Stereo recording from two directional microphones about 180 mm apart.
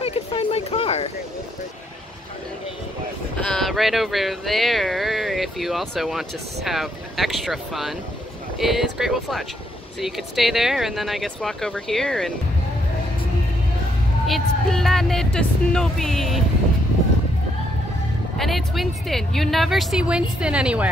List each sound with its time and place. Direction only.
0.0 s a sound: 30° left (ahead or behind)
3.4 s a woman's voice: centre (ahead or behind)
14.2 s a woman's voice: centre (ahead or behind)
18.4 s a woman's voice: centre (ahead or behind)